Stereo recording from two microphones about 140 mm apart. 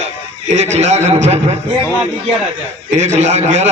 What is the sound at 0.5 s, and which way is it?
Speech, 50° right (ahead or behind).